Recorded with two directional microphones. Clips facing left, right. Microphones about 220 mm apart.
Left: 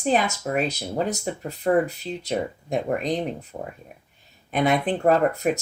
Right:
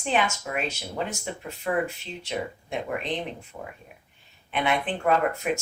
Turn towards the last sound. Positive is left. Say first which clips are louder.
# left 4 dB
turn(degrees=40)  # may be behind; listen again after turning